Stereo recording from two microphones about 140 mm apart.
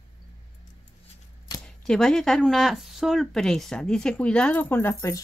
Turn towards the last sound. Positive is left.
turn(degrees=20)  # may be behind; listen again after turning